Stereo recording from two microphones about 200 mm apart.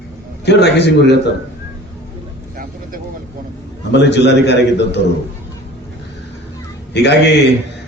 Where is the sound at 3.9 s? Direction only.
60° left (ahead or behind).